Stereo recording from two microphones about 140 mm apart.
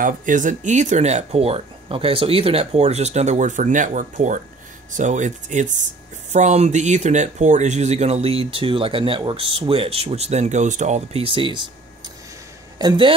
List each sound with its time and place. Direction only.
0.0 s speech: 65° right (ahead or behind); by 11.6 s 35° right (ahead or behind)
12.7 s a man's voice: 30° right (ahead or behind)